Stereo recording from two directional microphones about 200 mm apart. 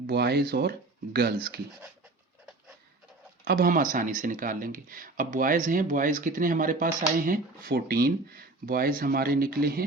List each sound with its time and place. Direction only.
0.1 s speech: 55° right (ahead or behind)
3.4 s speech: 45° right (ahead or behind)